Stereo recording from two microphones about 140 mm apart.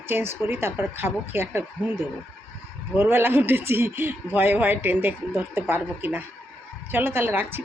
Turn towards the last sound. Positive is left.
turn(degrees=-15)  # may be behind; listen again after turning